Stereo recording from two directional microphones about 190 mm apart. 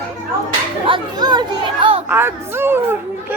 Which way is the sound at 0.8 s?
25° right (ahead or behind).